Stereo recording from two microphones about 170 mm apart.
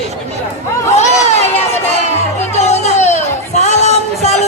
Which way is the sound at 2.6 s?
40° left (ahead or behind).